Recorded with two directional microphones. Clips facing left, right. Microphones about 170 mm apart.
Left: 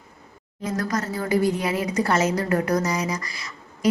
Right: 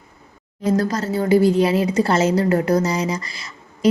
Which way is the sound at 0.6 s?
30° right (ahead or behind).